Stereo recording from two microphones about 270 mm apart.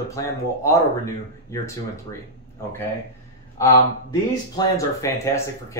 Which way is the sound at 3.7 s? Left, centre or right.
Centre.